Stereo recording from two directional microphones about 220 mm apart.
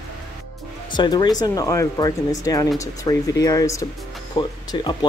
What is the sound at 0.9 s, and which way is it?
Speech, 20° left (ahead or behind).